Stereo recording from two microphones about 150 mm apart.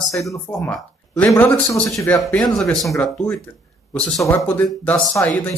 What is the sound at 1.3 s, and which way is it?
Speech, 10° left (ahead or behind).